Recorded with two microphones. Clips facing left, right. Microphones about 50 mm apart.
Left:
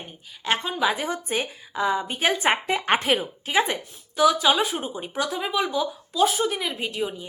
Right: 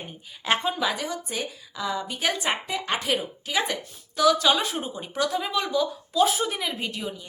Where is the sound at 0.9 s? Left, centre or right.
Left.